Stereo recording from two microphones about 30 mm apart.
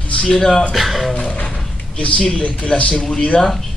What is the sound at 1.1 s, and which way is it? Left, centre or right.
Speech, left.